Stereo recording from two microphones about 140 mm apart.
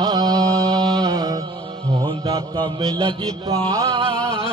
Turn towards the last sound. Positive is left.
turn(degrees=-25)  # may be behind; listen again after turning